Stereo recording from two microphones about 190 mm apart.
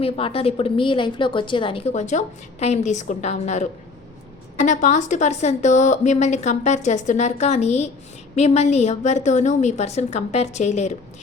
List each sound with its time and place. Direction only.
0.0 s a woman's voice: 30° left (ahead or behind)